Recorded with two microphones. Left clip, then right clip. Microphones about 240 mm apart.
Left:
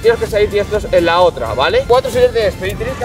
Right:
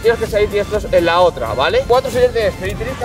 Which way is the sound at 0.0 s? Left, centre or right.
Centre.